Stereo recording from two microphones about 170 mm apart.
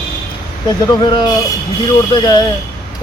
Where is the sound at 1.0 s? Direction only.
25° left (ahead or behind).